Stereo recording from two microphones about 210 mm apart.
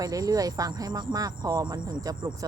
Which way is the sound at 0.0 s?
15° right (ahead or behind).